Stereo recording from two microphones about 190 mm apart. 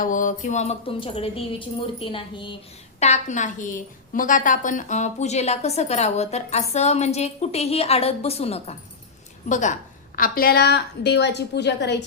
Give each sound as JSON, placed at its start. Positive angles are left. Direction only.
{"t": 0.0, "sound": "music", "side_deg": 45}
{"t": 3.0, "sound": "a woman's voice", "side_deg": 40}